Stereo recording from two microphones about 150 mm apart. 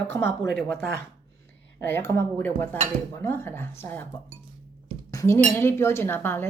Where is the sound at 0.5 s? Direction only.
90° right.